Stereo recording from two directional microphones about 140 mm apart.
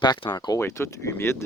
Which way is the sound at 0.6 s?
15° left (ahead or behind).